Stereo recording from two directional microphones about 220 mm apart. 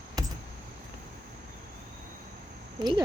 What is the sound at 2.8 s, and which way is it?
Speech, 20° right (ahead or behind).